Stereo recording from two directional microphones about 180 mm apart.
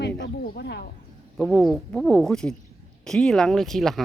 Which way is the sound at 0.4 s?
60° left (ahead or behind).